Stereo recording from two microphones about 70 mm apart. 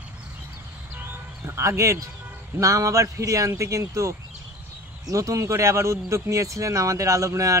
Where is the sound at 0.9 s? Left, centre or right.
Right.